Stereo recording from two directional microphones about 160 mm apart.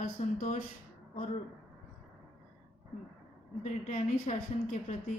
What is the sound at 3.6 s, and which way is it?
A woman's voice, 50° left (ahead or behind).